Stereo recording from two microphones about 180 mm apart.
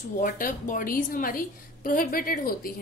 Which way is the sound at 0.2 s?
50° left (ahead or behind).